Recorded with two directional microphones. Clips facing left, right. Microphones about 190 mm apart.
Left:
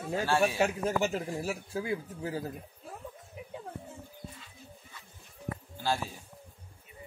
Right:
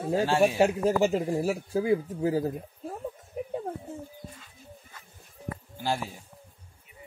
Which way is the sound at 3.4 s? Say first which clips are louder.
Right 13 dB; 45° right (ahead or behind).